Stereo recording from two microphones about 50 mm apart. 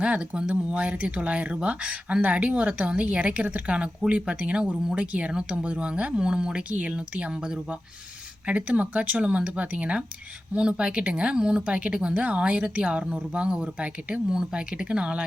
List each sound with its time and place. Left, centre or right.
0.0 s speech: right